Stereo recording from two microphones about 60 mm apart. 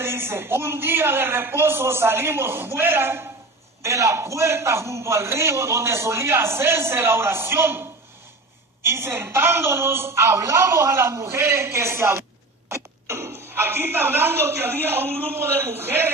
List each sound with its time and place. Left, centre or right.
0.0 s a man's voice: right
3.8 s a man's voice: right